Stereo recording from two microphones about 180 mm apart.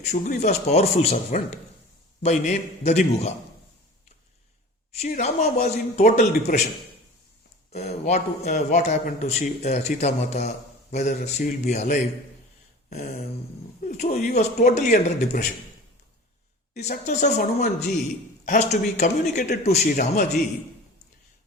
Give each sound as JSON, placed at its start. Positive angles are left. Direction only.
{"t": 0.0, "sound": "a man's voice", "side_deg": 40}
{"t": 4.9, "sound": "a man's voice", "side_deg": 40}
{"t": 7.7, "sound": "a man's voice", "side_deg": 40}
{"t": 13.8, "sound": "a man's voice", "side_deg": 45}
{"t": 16.8, "sound": "a man's voice", "side_deg": 40}